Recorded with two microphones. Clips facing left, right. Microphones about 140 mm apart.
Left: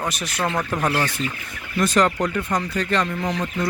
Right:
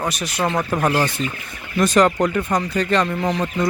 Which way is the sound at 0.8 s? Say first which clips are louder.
Right 4 dB; 30° right (ahead or behind).